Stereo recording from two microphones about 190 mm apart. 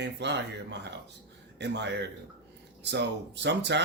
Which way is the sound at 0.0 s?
65° right (ahead or behind).